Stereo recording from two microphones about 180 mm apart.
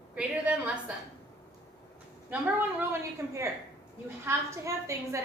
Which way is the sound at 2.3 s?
10° right (ahead or behind).